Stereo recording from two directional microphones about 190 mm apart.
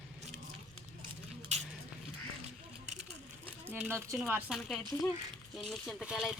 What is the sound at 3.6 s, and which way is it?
Speech, 10° right (ahead or behind).